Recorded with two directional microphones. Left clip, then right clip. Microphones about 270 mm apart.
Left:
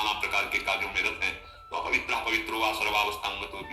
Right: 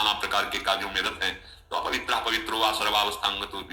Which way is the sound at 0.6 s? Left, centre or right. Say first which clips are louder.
Right 3 dB; right.